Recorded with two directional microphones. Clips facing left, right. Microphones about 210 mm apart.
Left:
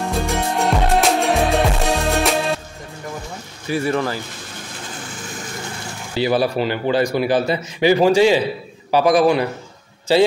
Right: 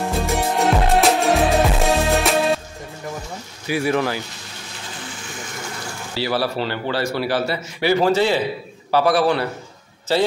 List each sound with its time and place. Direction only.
0.3 s music: centre (ahead or behind)
3.6 s speech: centre (ahead or behind)
6.1 s speech: 20° left (ahead or behind)